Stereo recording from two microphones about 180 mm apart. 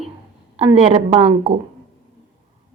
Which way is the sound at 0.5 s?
35° right (ahead or behind).